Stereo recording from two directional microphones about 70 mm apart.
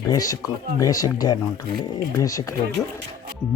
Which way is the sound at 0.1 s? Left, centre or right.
Left.